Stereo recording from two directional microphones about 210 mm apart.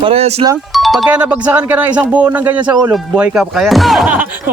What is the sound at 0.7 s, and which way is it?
Speech, centre (ahead or behind).